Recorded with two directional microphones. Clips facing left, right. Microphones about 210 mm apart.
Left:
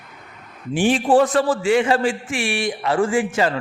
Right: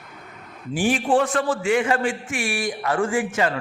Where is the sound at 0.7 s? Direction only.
25° left (ahead or behind).